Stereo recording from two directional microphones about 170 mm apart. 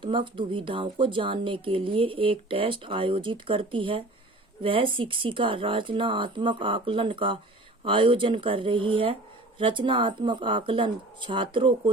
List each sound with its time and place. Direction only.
0.0 s speech: 30° right (ahead or behind)